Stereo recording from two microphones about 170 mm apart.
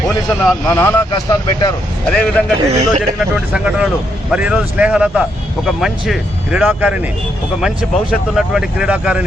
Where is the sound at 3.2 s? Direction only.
5° right (ahead or behind).